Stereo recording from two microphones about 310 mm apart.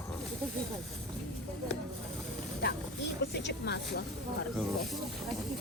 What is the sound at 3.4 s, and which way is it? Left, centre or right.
Speech, left.